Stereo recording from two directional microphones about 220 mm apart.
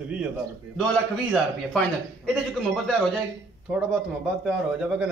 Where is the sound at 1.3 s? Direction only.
Centre (ahead or behind).